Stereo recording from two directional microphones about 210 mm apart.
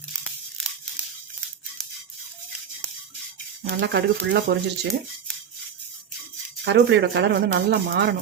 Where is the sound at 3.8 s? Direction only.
55° right (ahead or behind).